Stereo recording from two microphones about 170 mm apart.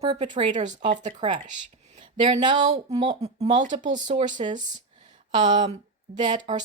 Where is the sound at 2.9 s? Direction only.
30° right (ahead or behind).